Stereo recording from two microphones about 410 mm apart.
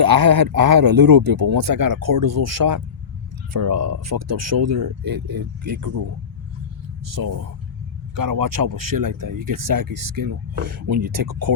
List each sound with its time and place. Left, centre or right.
0.0 s speech: right
3.7 s speech: right
5.0 s speech: right
7.1 s speech: right